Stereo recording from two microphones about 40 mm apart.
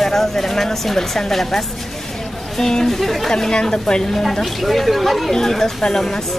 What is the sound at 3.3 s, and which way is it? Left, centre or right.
Speech, centre.